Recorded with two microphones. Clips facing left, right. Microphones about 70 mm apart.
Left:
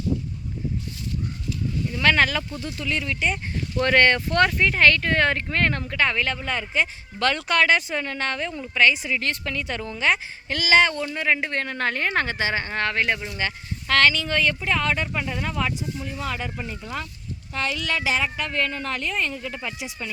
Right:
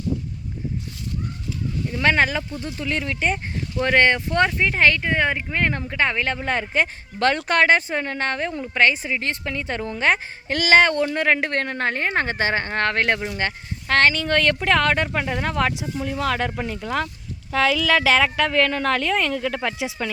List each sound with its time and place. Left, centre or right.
1.9 s speech: right
3.8 s speech: centre; by 13.2 s right
13.2 s speech: right
17.5 s speech: right